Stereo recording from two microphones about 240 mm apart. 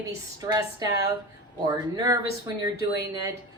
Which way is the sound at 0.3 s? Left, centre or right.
Centre.